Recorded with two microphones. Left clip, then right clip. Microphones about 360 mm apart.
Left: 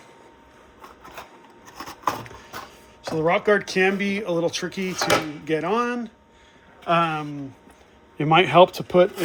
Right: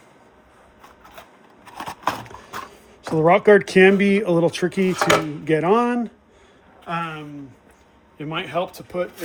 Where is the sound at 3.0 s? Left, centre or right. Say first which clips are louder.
Right 5 dB; centre.